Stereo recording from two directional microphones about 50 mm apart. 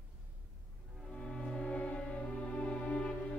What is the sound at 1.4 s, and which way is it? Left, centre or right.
Music, centre.